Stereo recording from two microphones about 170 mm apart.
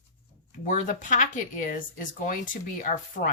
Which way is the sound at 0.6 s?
50° left (ahead or behind).